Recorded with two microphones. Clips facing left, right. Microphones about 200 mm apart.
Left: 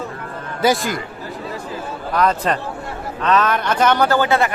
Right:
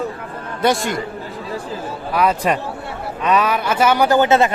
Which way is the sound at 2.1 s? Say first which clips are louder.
Right 1 dB; 10° right (ahead or behind).